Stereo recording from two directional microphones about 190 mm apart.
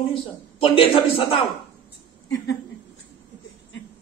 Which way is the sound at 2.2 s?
70° left (ahead or behind).